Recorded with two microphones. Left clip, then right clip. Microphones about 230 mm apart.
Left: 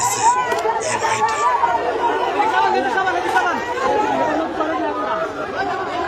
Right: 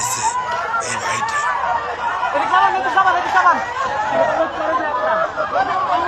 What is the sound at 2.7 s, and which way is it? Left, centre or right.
Speech, centre.